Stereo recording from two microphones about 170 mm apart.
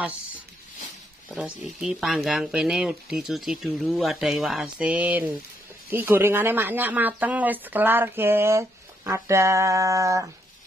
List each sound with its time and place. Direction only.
1.3 s speech: centre (ahead or behind); by 10.2 s 20° right (ahead or behind)